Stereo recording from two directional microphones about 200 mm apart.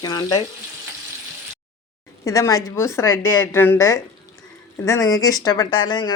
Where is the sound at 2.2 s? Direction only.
15° left (ahead or behind).